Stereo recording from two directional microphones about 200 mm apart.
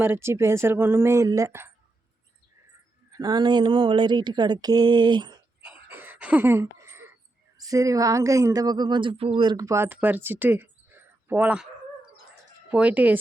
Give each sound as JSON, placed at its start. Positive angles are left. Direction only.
{"t": 0.0, "sound": "a woman's voice", "side_deg": -10}
{"t": 3.1, "sound": "speech", "side_deg": -20}
{"t": 5.6, "sound": "a sound", "side_deg": -10}
{"t": 7.6, "sound": "a woman's voice", "side_deg": -15}
{"t": 12.7, "sound": "a woman's voice", "side_deg": -5}